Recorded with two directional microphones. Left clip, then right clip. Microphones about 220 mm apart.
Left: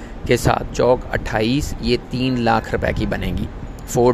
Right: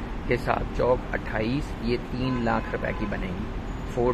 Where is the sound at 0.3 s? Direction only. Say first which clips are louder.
Left 8 dB; 40° left (ahead or behind).